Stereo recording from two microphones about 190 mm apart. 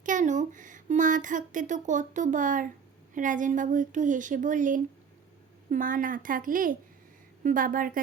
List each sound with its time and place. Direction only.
0.0 s speech: 40° right (ahead or behind)